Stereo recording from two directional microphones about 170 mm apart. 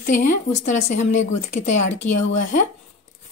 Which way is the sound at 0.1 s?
45° left (ahead or behind).